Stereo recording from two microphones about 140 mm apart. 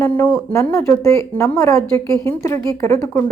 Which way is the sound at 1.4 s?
20° left (ahead or behind).